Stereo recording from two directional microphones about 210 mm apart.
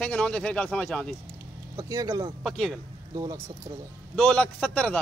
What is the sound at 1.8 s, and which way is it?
Speech, 15° right (ahead or behind).